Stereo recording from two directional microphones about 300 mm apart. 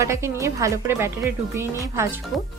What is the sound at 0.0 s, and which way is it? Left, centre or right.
A woman's voice, centre.